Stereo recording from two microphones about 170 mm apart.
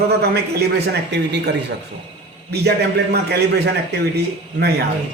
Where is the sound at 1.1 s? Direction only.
90° right.